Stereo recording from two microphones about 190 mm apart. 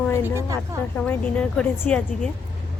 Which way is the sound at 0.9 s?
10° left (ahead or behind).